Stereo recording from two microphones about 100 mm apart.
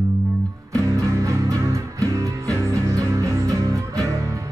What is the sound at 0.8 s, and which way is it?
Music, 30° right (ahead or behind).